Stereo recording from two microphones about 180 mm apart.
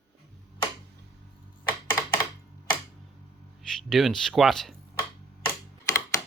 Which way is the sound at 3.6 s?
Centre (ahead or behind).